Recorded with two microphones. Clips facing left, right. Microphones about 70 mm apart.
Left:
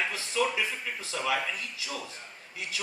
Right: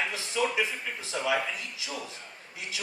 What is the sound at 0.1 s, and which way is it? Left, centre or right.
A man's voice, right.